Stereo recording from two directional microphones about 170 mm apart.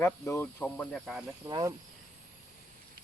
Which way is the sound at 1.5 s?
20° right (ahead or behind).